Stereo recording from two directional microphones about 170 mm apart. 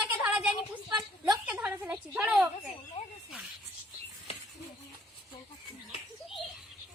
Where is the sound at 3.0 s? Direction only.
40° left (ahead or behind).